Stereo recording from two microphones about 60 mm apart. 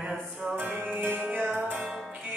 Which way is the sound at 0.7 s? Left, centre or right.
Right.